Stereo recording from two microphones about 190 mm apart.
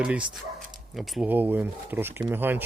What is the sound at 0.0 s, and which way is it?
Speech, 5° right (ahead or behind).